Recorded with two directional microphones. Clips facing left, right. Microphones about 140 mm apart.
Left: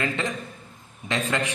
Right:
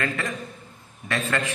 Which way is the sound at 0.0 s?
20° left (ahead or behind).